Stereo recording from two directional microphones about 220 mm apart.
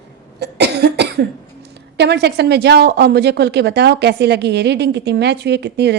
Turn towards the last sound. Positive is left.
turn(degrees=-50)  # may be behind; listen again after turning